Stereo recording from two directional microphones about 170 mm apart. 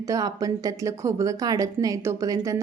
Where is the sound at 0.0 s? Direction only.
20° right (ahead or behind).